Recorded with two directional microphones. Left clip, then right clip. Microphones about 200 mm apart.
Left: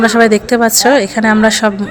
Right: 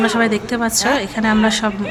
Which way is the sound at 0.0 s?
30° left (ahead or behind).